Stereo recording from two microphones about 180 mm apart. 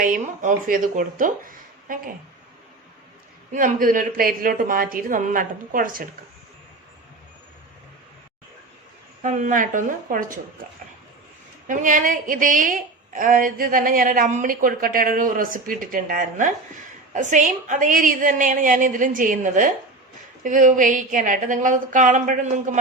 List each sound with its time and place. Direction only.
0.0 s a woman's voice: 50° right (ahead or behind)
3.5 s a woman's voice: 50° right (ahead or behind)
9.2 s a woman's voice: 45° right (ahead or behind)
11.7 s a woman's voice: 45° right (ahead or behind)